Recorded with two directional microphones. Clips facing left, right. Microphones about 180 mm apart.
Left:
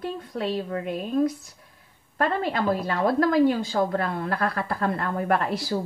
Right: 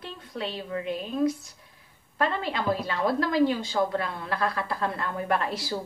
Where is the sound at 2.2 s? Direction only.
50° left (ahead or behind).